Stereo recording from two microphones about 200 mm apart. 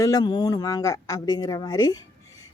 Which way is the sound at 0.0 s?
20° left (ahead or behind).